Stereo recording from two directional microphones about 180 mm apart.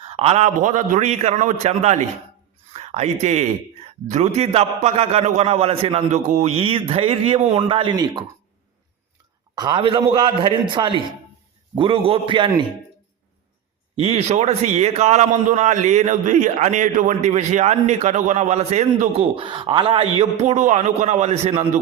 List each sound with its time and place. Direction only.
0.0 s a man's voice: 30° right (ahead or behind)
9.6 s a man's voice: 25° right (ahead or behind)
13.9 s a man's voice: 30° right (ahead or behind)